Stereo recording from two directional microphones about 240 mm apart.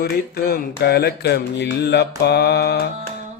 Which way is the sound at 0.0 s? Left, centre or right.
Left.